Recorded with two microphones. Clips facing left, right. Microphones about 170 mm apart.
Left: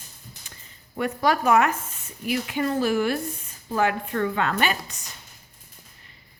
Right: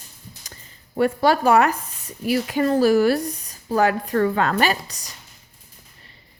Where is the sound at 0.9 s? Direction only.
30° right (ahead or behind).